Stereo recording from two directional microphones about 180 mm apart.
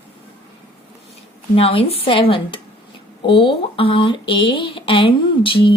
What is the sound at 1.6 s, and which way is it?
Speech, 30° left (ahead or behind).